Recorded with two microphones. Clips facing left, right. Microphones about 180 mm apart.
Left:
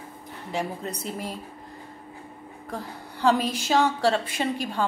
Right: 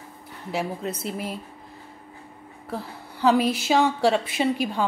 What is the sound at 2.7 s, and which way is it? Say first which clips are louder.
A woman's voice: right 2 dB; 10° right (ahead or behind).